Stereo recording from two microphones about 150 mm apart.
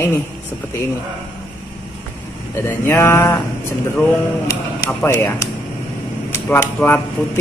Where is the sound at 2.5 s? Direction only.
15° left (ahead or behind).